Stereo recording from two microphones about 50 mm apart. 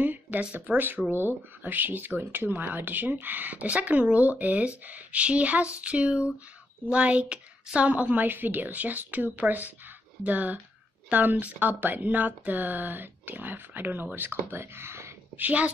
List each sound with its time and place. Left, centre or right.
0.0 s a sound: right
0.4 s speech: right
0.7 s speech: right
15.3 s speech: right